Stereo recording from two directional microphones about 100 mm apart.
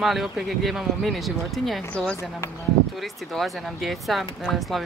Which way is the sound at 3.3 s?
Centre (ahead or behind).